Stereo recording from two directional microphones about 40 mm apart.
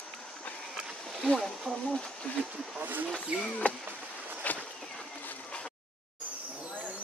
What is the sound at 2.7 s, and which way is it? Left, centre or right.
Speech, right.